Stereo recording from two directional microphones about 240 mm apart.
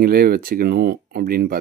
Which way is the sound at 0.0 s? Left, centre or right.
Right.